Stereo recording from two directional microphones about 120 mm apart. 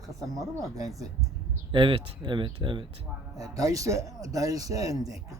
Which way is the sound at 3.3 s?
30° right (ahead or behind).